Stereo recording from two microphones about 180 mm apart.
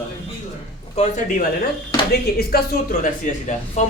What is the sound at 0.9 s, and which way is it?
Speech, 45° left (ahead or behind).